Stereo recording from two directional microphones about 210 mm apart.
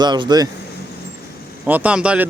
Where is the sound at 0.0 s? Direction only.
20° right (ahead or behind).